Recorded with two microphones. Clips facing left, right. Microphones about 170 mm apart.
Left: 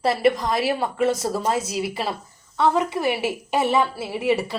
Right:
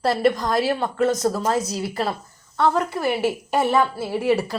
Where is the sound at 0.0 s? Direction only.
5° left (ahead or behind).